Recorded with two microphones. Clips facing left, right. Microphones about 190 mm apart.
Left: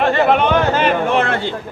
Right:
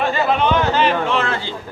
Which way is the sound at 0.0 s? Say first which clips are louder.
Left 4 dB; 65° left (ahead or behind).